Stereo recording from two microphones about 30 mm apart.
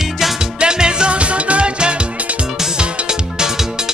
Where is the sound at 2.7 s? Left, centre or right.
Right.